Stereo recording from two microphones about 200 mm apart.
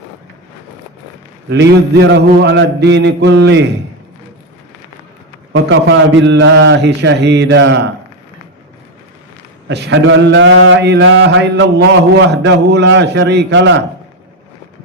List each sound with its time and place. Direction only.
1.5 s mantra: 60° right (ahead or behind)
5.6 s mantra: 60° right (ahead or behind)
9.6 s mantra: 60° right (ahead or behind)